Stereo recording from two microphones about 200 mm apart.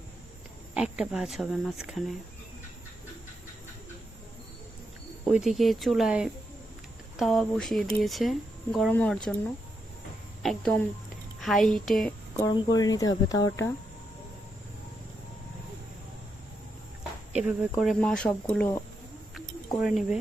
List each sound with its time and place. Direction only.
0.7 s speech: 5° right (ahead or behind)
5.2 s speech: centre (ahead or behind)
10.4 s speech: centre (ahead or behind)
12.7 s speech: 20° left (ahead or behind)
17.0 s speech: 5° right (ahead or behind)
19.8 s speech: centre (ahead or behind)